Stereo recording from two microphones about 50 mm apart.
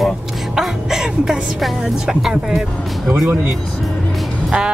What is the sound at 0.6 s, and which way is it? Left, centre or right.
Music, centre.